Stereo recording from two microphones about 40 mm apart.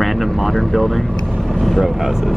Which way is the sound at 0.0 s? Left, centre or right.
Centre.